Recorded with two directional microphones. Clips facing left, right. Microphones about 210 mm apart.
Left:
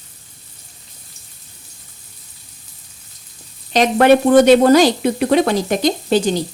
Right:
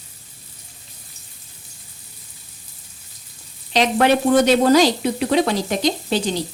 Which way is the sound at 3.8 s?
50° left (ahead or behind).